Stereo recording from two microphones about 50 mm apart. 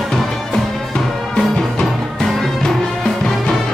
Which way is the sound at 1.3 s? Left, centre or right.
Centre.